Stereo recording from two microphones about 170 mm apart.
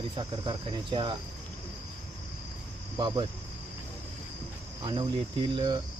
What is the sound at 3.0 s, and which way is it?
Speech, 30° right (ahead or behind).